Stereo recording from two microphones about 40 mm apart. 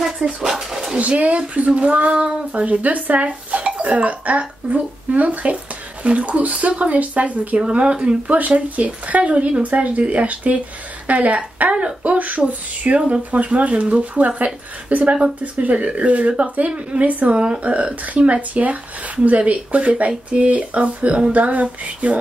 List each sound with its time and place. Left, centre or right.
0.4 s speech: centre
0.9 s speech: right
7.6 s speech: right
8.3 s speech: right
17.3 s speech: right